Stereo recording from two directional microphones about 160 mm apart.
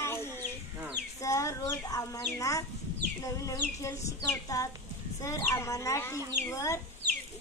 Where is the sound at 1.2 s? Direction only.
20° left (ahead or behind).